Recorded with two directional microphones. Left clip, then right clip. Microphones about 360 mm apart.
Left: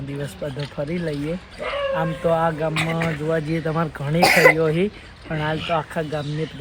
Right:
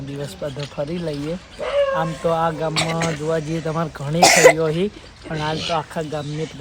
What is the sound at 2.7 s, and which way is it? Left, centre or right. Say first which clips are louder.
Speech: right 2 dB; right.